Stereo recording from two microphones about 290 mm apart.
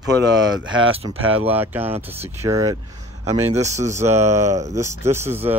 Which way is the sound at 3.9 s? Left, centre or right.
Centre.